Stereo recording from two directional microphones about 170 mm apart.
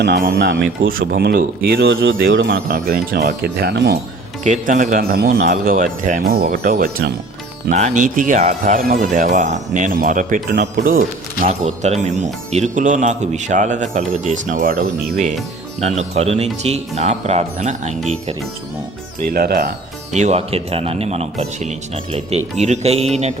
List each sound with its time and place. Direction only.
0.0 s speech: 65° right (ahead or behind)
4.4 s speech: 45° right (ahead or behind)
7.7 s speech: 45° right (ahead or behind)
11.4 s speech: 40° right (ahead or behind)
15.8 s speech: 40° right (ahead or behind)
19.3 s speech: 65° right (ahead or behind)
20.1 s speech: 40° right (ahead or behind)